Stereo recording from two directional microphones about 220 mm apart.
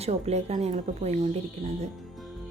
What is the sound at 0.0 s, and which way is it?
Speech, 30° right (ahead or behind).